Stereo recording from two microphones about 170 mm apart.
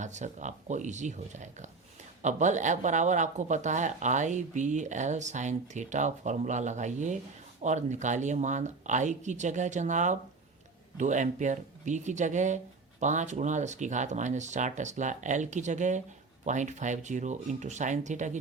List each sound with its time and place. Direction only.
0.0 s speech: 45° right (ahead or behind)